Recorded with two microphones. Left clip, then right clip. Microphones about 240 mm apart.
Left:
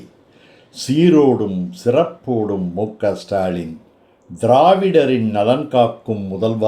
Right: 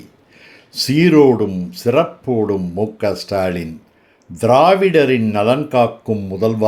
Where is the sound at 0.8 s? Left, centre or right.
Right.